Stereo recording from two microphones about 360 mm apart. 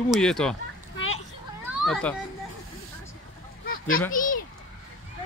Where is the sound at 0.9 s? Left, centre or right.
Left.